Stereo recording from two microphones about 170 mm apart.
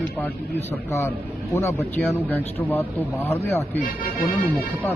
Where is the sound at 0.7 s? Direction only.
15° left (ahead or behind).